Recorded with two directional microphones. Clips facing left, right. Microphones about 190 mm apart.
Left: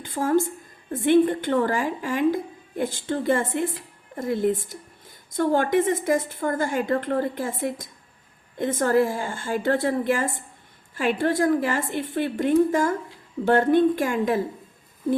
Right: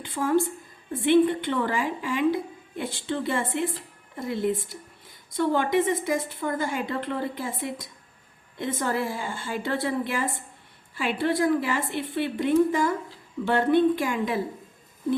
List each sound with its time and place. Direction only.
0.0 s a woman's voice: 45° left (ahead or behind)